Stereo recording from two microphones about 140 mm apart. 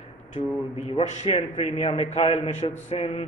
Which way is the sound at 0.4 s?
45° left (ahead or behind).